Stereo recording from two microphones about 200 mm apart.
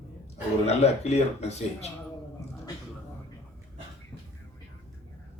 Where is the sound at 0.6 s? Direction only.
30° left (ahead or behind).